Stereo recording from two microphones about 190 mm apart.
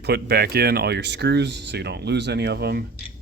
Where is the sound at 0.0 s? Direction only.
60° right (ahead or behind).